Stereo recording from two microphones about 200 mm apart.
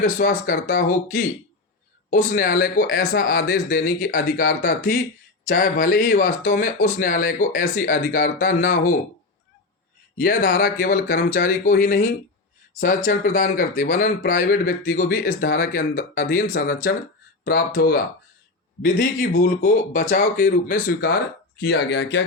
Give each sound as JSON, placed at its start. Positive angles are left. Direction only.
{"t": 0.0, "sound": "speech", "side_deg": 45}
{"t": 10.2, "sound": "speech", "side_deg": 45}